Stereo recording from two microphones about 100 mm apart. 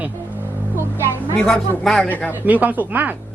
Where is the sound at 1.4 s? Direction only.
5° left (ahead or behind).